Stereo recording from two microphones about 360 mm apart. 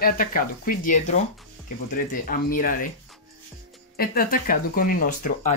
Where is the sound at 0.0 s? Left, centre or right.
Left.